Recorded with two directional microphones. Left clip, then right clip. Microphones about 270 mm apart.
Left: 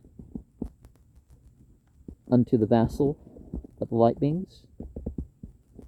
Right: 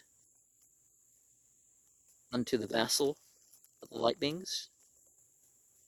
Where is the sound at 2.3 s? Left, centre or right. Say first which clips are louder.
Left 11 dB; centre.